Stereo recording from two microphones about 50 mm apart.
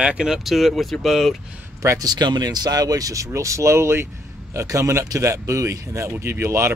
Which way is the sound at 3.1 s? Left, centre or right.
Right.